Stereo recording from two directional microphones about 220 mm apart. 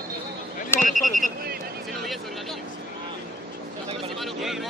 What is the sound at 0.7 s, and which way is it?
Speech, 40° left (ahead or behind).